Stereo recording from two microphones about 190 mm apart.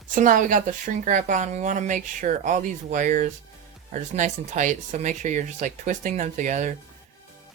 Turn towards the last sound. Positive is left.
turn(degrees=-40)  # may be behind; listen again after turning